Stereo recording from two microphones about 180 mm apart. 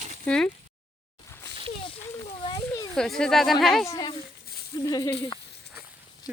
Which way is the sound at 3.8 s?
15° left (ahead or behind).